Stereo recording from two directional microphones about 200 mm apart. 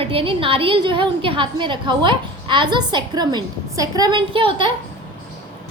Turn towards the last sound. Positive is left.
turn(degrees=-25)  # may be behind; listen again after turning